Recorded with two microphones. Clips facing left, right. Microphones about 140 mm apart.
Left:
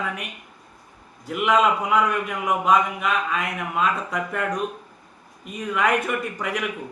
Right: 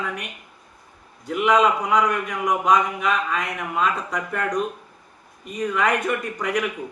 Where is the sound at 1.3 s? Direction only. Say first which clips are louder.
Right 1 dB; 5° left (ahead or behind).